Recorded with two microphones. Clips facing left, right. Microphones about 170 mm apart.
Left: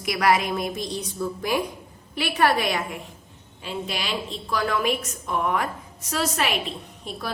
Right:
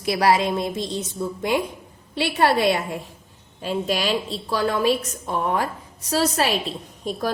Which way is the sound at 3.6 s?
40° right (ahead or behind).